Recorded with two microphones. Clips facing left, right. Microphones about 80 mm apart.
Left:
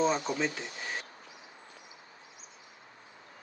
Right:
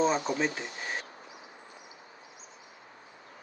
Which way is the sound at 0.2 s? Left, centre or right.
Right.